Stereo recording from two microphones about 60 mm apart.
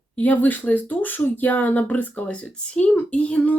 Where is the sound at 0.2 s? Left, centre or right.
Left.